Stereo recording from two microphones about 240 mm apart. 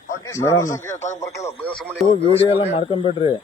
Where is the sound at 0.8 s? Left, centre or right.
Centre.